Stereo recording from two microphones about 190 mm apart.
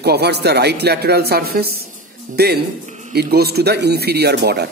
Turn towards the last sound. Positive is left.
turn(degrees=-60)  # may be behind; listen again after turning